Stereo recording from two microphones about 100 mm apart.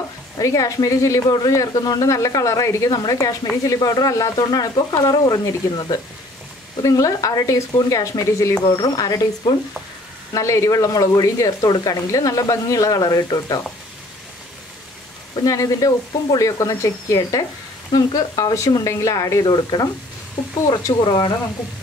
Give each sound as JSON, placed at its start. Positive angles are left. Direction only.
{"t": 0.4, "sound": "a woman's voice", "side_deg": 35}
{"t": 10.3, "sound": "a woman's voice", "side_deg": 30}
{"t": 15.4, "sound": "a woman's voice", "side_deg": 35}
{"t": 19.4, "sound": "speech", "side_deg": 45}